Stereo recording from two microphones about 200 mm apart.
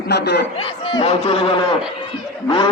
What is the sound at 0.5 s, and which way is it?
A man's voice, 25° left (ahead or behind).